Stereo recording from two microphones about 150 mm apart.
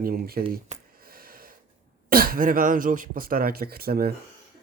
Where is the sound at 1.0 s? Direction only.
80° right.